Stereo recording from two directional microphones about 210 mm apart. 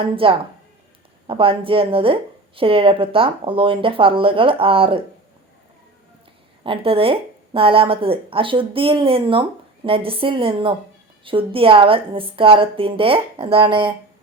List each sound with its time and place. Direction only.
0.0 s speech: 25° right (ahead or behind)
6.7 s speech: 25° right (ahead or behind)